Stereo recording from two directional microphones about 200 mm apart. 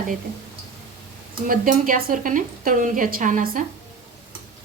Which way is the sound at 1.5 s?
45° right (ahead or behind).